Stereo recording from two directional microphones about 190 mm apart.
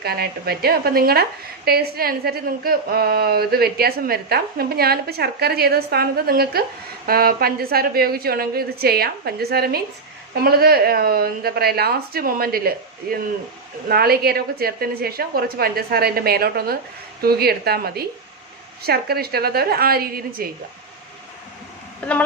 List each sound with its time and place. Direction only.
0.0 s a woman's voice: 55° right (ahead or behind)